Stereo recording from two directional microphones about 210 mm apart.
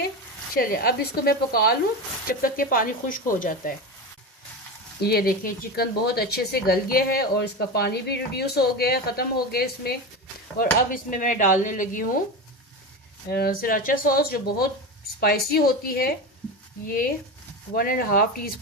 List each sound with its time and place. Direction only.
0.6 s speech: 45° left (ahead or behind)
5.0 s speech: 45° left (ahead or behind)
13.3 s speech: 50° left (ahead or behind)